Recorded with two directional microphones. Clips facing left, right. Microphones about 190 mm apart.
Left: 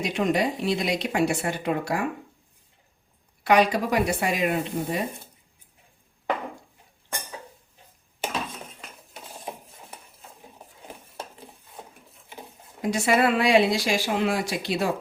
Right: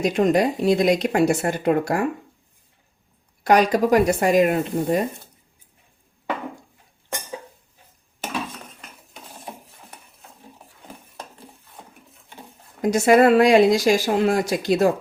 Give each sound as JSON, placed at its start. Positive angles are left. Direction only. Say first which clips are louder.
{"t": 0.0, "sound": "speech", "louder": "right 6 dB", "side_deg": -45}
{"t": 3.4, "sound": "speech", "louder": "right 4 dB", "side_deg": -40}
{"t": 12.8, "sound": "speech", "louder": "right 7 dB", "side_deg": -45}